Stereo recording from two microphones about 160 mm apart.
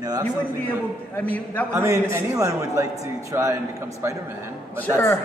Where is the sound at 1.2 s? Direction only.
10° left (ahead or behind).